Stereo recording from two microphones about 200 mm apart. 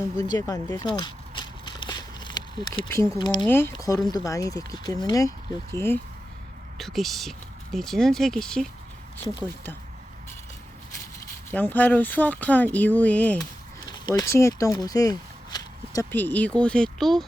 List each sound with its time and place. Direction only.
0.2 s a sound: 20° left (ahead or behind)
3.4 s speech: 10° left (ahead or behind)
6.7 s speech: centre (ahead or behind)
11.5 s speech: 10° left (ahead or behind)
13.9 s speech: 20° left (ahead or behind); by 17.2 s centre (ahead or behind)